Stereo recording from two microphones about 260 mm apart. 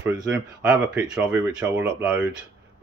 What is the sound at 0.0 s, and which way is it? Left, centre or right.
Speech, centre.